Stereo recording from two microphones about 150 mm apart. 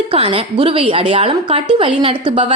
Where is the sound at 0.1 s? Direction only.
40° right (ahead or behind).